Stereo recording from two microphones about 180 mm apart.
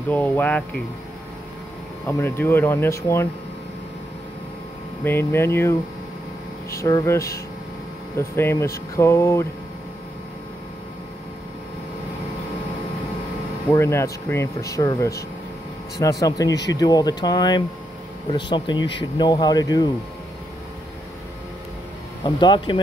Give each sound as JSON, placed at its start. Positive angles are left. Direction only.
{"t": 0.1, "sound": "speech", "side_deg": 10}
{"t": 2.0, "sound": "speech", "side_deg": 15}
{"t": 5.0, "sound": "speech", "side_deg": 15}
{"t": 6.8, "sound": "speech", "side_deg": 15}
{"t": 13.7, "sound": "speech", "side_deg": 15}
{"t": 22.2, "sound": "speech", "side_deg": 25}